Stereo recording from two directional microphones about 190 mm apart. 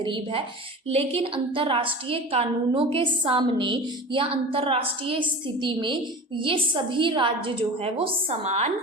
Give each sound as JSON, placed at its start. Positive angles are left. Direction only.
{"t": 0.0, "sound": "a woman's voice", "side_deg": -25}